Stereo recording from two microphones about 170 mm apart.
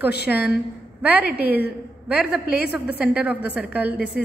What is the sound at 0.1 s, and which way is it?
Speech, 70° left (ahead or behind).